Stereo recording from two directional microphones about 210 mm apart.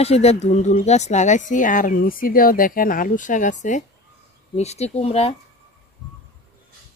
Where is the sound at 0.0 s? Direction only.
30° left (ahead or behind).